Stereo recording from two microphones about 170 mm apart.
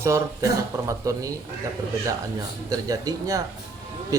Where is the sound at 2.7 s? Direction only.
20° right (ahead or behind).